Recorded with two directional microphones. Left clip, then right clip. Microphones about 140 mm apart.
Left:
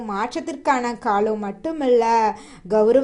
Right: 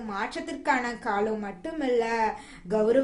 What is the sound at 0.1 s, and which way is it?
A woman's voice, 50° left (ahead or behind).